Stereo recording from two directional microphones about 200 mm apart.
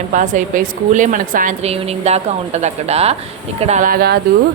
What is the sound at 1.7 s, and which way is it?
A woman's voice, 30° right (ahead or behind).